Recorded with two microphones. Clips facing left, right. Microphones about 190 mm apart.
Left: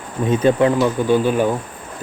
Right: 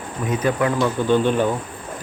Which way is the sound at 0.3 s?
25° left (ahead or behind).